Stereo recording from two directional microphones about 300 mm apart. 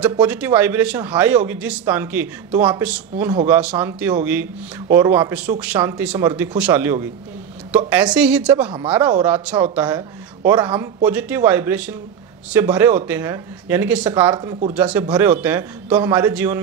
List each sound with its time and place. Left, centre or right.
0.1 s a man's voice: centre
14.3 s speech: centre
14.7 s a man's voice: centre